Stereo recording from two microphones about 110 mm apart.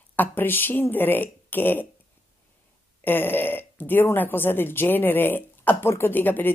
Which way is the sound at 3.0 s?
20° left (ahead or behind).